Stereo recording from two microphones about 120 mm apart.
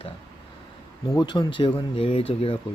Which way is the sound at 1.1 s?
35° left (ahead or behind).